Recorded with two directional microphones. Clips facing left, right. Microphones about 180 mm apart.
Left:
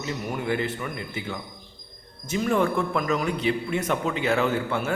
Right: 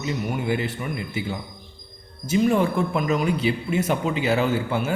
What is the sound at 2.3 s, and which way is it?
Speech, 15° right (ahead or behind).